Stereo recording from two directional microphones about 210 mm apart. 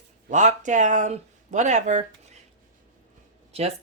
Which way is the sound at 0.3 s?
35° right (ahead or behind).